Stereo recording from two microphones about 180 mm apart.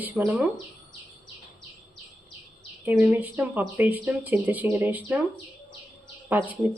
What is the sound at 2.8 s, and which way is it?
Speech, 10° right (ahead or behind).